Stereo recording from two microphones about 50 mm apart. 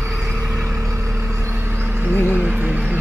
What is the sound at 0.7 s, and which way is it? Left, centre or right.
Vehicle, right.